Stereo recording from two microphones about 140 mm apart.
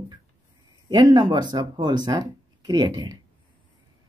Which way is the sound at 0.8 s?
30° right (ahead or behind).